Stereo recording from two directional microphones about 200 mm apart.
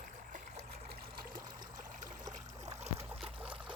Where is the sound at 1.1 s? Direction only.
40° right (ahead or behind).